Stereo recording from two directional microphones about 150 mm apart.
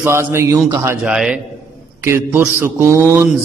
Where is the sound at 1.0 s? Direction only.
5° right (ahead or behind).